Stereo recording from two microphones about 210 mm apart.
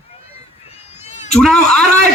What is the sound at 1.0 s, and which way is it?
Cat, 35° left (ahead or behind).